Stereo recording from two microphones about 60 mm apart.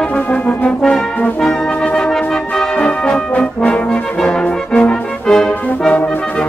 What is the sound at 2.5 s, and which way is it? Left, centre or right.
Brass instrument, centre.